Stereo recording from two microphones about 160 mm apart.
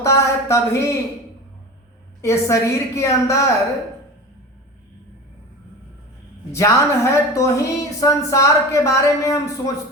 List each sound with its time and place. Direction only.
0.0 s a woman's voice: 20° left (ahead or behind)
2.2 s a woman's voice: 15° left (ahead or behind)
6.5 s a woman's voice: 20° left (ahead or behind)